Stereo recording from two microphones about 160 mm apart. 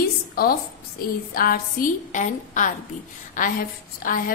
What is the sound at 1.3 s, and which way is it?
A woman's voice, 65° left (ahead or behind).